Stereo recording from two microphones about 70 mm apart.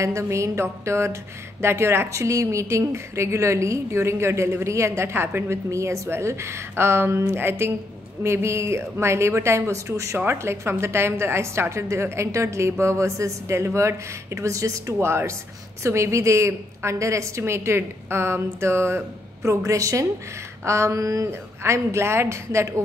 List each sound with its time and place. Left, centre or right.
0.0 s a woman's voice: right